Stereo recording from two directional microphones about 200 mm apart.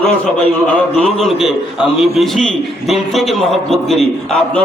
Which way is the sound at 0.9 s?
Centre (ahead or behind).